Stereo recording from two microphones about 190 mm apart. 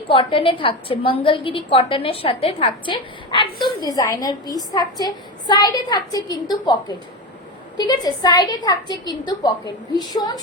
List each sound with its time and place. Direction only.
0.1 s a woman's voice: 30° left (ahead or behind)